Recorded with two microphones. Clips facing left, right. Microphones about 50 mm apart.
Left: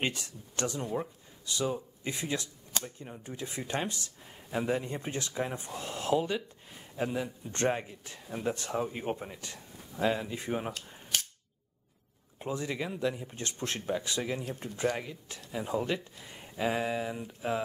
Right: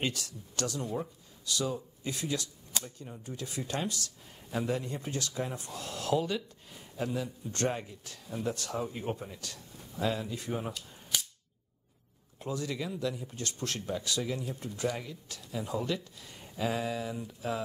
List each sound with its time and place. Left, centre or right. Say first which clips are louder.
0.0 s a man's voice: left 1 dB; left
12.4 s a man's voice: left 1 dB; left